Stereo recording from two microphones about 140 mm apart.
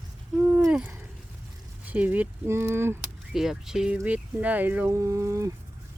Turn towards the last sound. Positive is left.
turn(degrees=-20)  # may be behind; listen again after turning